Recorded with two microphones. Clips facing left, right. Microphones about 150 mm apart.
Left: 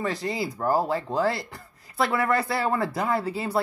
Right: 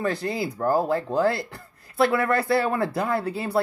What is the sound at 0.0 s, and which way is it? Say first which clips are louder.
Speech: right 2 dB; 60° right (ahead or behind).